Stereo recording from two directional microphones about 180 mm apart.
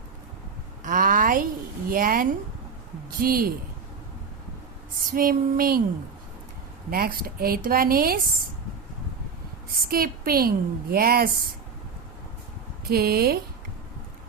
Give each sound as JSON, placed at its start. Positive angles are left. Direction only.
{"t": 0.9, "sound": "a sound", "side_deg": -50}
{"t": 1.9, "sound": "speech", "side_deg": -50}
{"t": 5.1, "sound": "a woman's voice", "side_deg": -55}
{"t": 6.9, "sound": "a woman's voice", "side_deg": -55}
{"t": 9.9, "sound": "a woman's voice", "side_deg": -55}
{"t": 12.9, "sound": "a woman's voice", "side_deg": -60}